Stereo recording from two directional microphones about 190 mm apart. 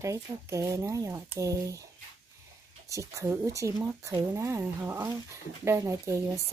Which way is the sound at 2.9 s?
15° right (ahead or behind).